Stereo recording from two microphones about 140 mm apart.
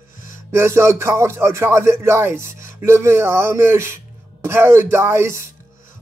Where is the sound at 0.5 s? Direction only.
20° right (ahead or behind).